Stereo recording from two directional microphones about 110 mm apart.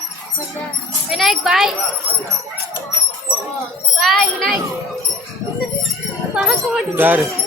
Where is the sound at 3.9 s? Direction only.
Centre (ahead or behind).